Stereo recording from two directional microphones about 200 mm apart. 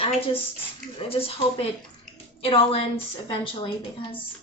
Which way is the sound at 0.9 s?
30° left (ahead or behind).